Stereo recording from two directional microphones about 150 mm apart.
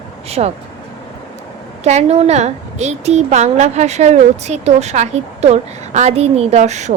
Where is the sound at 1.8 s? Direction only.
45° right (ahead or behind).